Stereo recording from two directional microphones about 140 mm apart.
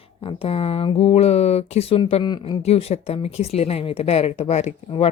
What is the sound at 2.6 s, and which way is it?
Speech, 45° left (ahead or behind).